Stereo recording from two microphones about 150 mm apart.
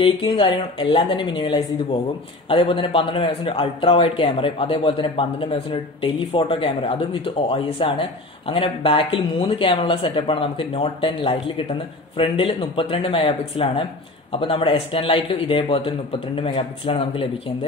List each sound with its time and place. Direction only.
0.0 s a man's voice: 30° left (ahead or behind)